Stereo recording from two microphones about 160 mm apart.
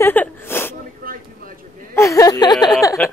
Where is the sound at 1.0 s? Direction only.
60° right (ahead or behind).